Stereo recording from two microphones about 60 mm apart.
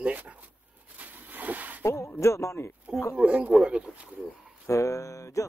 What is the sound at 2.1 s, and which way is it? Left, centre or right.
Speech, left.